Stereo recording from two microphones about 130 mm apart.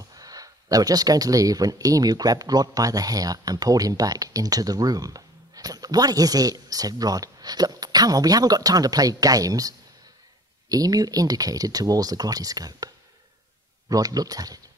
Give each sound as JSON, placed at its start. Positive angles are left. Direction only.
{"t": 0.1, "sound": "speech", "side_deg": -30}